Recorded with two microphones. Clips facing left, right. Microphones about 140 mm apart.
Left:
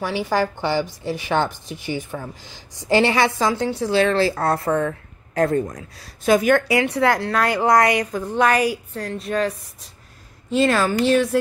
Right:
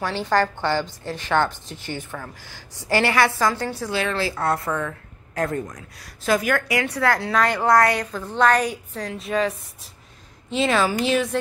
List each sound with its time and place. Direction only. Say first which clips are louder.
0.0 s a woman's voice: even; 10° left (ahead or behind)
3.9 s a woman's voice: left 8 dB; 35° left (ahead or behind); by 7.2 s 20° left (ahead or behind)
7.2 s a woman's voice: left 1 dB; centre (ahead or behind)